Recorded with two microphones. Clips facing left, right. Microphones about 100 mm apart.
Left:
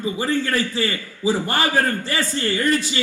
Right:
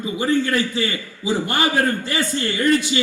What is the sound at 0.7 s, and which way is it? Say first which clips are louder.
A man's voice: even; 35° left (ahead or behind).